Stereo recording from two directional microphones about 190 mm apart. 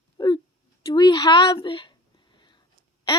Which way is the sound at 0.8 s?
20° left (ahead or behind).